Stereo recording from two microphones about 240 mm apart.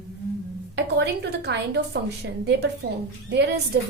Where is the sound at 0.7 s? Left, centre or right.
Right.